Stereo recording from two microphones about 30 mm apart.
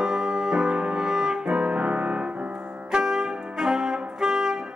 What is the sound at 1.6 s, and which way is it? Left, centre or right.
Music, right.